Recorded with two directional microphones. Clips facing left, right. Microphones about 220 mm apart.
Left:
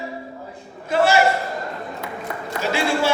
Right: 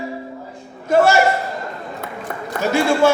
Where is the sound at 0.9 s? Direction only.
50° right (ahead or behind).